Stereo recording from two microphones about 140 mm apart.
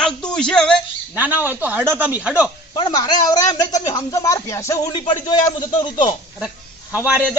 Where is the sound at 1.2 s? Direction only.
15° right (ahead or behind).